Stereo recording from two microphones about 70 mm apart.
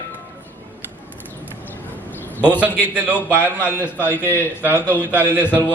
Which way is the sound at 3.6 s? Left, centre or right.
Left.